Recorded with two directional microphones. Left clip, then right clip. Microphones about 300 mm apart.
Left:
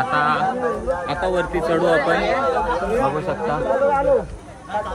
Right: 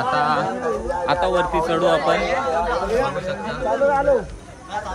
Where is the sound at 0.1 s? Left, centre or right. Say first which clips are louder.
Even; centre.